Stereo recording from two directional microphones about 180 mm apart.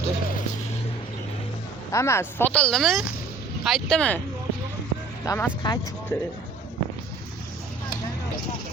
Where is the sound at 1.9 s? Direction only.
15° left (ahead or behind).